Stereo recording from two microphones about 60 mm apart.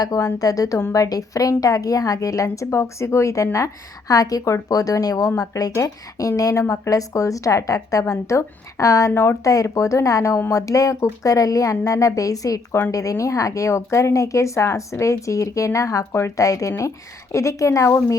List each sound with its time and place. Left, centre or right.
0.0 s a woman's voice: left
4.1 s a woman's voice: left
5.4 s speech: left
5.7 s a woman's voice: left
9.1 s speech: left
9.4 s a woman's voice: left